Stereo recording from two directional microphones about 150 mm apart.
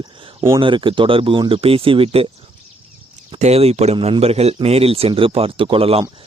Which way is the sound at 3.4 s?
45° right (ahead or behind).